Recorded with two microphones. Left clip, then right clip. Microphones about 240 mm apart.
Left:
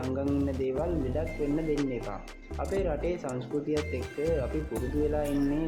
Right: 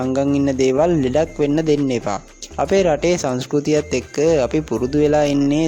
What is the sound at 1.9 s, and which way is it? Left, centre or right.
Speech, right.